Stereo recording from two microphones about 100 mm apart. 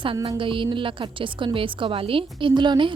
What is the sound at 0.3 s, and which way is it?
A woman's voice, 60° right (ahead or behind).